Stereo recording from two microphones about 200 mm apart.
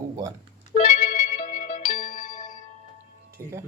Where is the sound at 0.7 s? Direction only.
40° left (ahead or behind).